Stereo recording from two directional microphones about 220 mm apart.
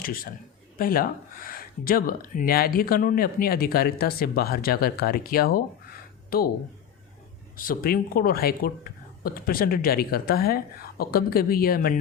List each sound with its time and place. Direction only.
0.8 s speech: 40° left (ahead or behind)
7.5 s speech: 40° left (ahead or behind)